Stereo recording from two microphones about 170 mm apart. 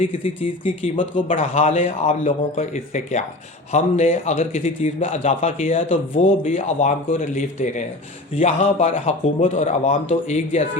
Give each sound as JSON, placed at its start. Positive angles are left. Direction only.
{"t": 0.6, "sound": "speech", "side_deg": 30}
{"t": 1.3, "sound": "speech", "side_deg": 45}